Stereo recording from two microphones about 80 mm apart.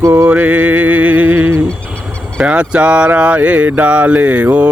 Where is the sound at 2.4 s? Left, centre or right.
Centre.